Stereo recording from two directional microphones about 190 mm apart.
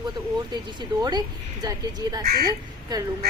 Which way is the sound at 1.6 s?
20° right (ahead or behind).